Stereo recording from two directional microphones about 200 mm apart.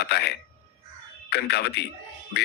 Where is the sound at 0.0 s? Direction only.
55° left (ahead or behind).